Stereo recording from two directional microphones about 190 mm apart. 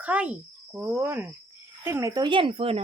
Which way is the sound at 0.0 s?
10° right (ahead or behind).